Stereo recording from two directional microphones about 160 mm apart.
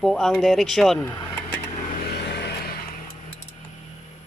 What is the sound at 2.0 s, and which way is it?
Vehicle, 90° left.